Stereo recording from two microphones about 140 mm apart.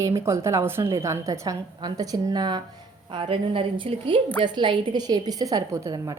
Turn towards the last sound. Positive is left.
turn(degrees=-25)  # may be behind; listen again after turning